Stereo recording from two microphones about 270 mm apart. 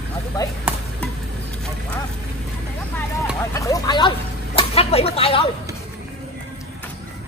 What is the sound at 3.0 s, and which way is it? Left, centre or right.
Speech, centre.